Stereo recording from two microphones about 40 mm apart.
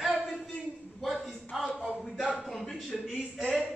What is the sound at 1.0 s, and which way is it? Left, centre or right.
Speech, centre.